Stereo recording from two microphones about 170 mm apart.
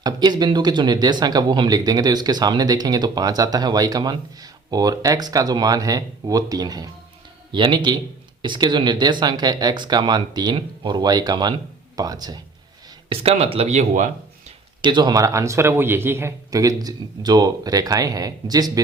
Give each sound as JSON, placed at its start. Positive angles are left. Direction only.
{"t": 0.0, "sound": "speech", "side_deg": -25}
{"t": 13.1, "sound": "speech", "side_deg": -35}
{"t": 14.8, "sound": "speech", "side_deg": -25}